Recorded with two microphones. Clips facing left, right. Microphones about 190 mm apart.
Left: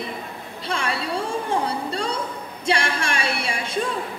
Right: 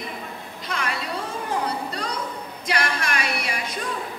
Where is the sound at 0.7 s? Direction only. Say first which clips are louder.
Left 3 dB; 30° left (ahead or behind).